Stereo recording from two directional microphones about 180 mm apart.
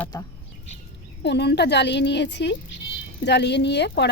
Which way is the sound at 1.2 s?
70° left (ahead or behind).